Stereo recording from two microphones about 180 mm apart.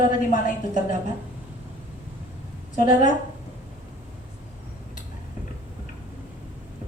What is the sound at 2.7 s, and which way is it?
Speech, 45° left (ahead or behind).